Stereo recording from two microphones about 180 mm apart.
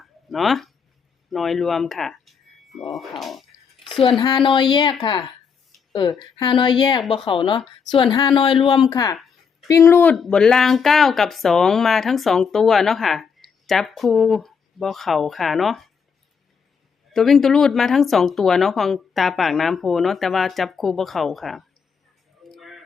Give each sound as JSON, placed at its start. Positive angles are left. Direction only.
{"t": 0.0, "sound": "a sound", "side_deg": 0}
{"t": 1.3, "sound": "speech", "side_deg": 0}
{"t": 4.4, "sound": "a woman's voice", "side_deg": 25}
{"t": 9.1, "sound": "a sound", "side_deg": 0}
{"t": 9.6, "sound": "a woman's voice", "side_deg": 15}
{"t": 17.1, "sound": "a woman's voice", "side_deg": 0}
{"t": 22.5, "sound": "tick", "side_deg": 0}